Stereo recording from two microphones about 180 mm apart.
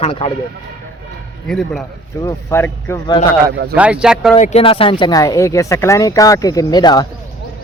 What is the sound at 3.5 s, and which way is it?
Speech, 65° right (ahead or behind).